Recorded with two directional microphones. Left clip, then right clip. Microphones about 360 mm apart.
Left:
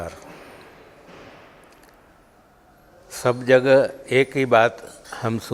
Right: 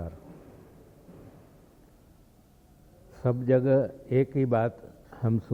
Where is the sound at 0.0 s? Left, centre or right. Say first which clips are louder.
Left 10 dB; centre.